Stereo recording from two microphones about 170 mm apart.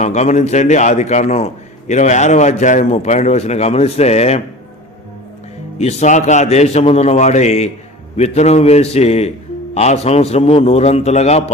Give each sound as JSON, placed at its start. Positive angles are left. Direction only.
{"t": 0.0, "sound": "a man's voice", "side_deg": 40}
{"t": 5.8, "sound": "a man's voice", "side_deg": 40}